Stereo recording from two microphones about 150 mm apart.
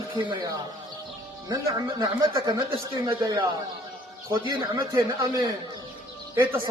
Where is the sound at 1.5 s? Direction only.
25° right (ahead or behind).